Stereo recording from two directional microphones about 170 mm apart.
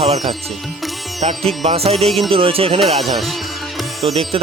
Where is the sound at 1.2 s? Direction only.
35° right (ahead or behind).